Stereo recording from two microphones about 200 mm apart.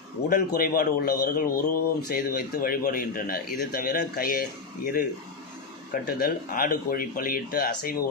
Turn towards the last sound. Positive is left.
turn(degrees=45)  # may be behind; listen again after turning